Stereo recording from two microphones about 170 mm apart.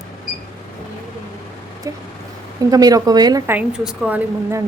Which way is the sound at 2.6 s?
20° right (ahead or behind).